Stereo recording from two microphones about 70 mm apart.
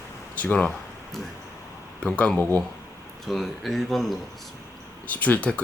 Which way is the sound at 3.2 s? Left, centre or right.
Centre.